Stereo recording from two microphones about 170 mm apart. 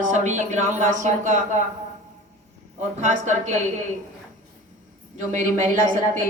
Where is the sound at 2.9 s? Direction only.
45° right (ahead or behind).